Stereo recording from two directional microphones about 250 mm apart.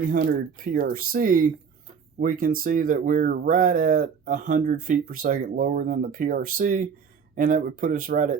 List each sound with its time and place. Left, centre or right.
0.1 s speech: right